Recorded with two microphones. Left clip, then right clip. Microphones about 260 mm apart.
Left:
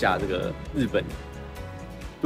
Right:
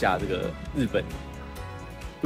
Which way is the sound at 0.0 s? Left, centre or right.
Centre.